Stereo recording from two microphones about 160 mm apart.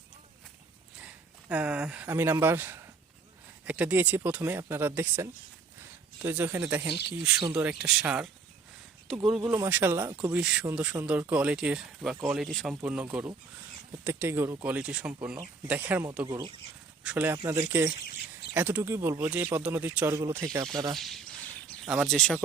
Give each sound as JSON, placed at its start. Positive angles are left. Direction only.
{"t": 1.0, "sound": "speech", "side_deg": -10}
{"t": 17.0, "sound": "speech", "side_deg": -5}
{"t": 18.0, "sound": "bird", "side_deg": 90}
{"t": 18.5, "sound": "speech", "side_deg": -10}
{"t": 21.7, "sound": "speech", "side_deg": 0}